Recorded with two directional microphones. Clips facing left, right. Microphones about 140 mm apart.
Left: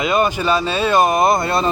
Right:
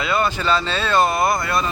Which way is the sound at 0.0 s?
15° left (ahead or behind).